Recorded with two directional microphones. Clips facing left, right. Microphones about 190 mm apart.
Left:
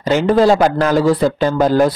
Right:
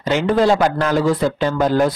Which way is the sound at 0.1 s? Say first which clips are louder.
Left 3 dB; 35° left (ahead or behind).